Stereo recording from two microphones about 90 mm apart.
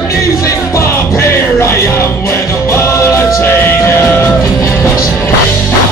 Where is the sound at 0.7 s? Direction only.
30° left (ahead or behind).